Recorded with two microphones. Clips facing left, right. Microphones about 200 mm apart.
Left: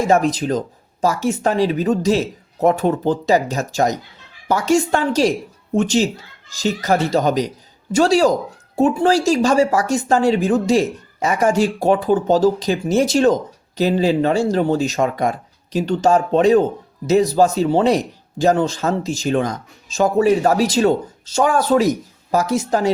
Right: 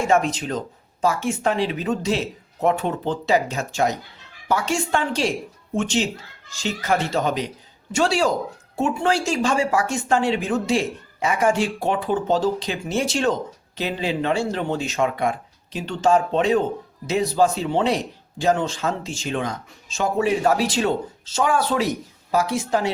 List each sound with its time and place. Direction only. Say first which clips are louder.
0.0 s speech: left 4 dB; 40° left (ahead or behind)